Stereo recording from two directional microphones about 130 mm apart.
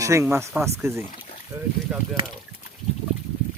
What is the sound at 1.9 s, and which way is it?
Speech, 10° right (ahead or behind).